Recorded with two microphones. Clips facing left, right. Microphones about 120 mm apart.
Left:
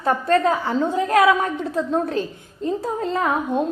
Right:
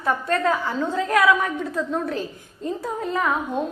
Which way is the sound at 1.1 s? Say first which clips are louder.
Left 2 dB; 25° left (ahead or behind).